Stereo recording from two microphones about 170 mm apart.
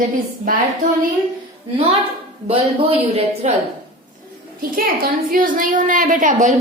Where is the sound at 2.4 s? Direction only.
35° right (ahead or behind).